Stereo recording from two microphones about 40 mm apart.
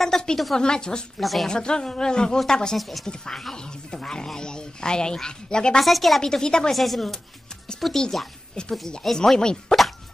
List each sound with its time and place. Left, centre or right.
0.0 s a sound: centre
0.6 s a woman's voice: left
1.2 s speech: centre
1.5 s a woman's voice: centre
2.8 s speech: centre
3.1 s speech: centre
5.8 s speech: centre
6.2 s a woman's voice: centre
6.7 s speech: centre
8.0 s a woman's voice: centre
9.0 s speech: centre